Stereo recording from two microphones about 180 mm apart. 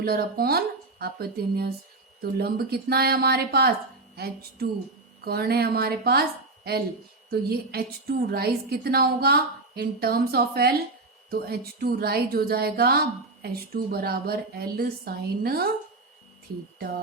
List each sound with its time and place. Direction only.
0.0 s a woman's voice: 60° right (ahead or behind)
7.3 s a woman's voice: 60° right (ahead or behind)